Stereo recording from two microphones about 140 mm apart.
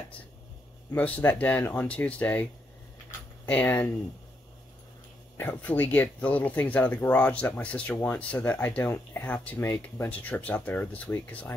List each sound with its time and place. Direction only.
0.9 s speech: 10° left (ahead or behind)
3.4 s speech: 10° left (ahead or behind)
5.4 s speech: 10° left (ahead or behind)